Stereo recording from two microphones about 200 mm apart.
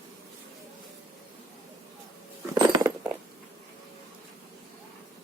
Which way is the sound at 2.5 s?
20° right (ahead or behind).